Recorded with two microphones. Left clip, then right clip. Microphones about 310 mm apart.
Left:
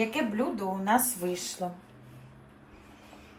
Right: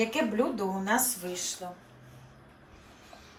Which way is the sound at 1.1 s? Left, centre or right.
Centre.